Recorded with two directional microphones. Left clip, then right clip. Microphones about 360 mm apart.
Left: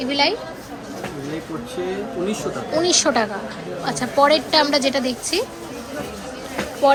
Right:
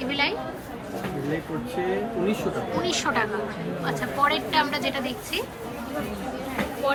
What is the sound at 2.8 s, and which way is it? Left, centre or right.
A woman's voice, centre.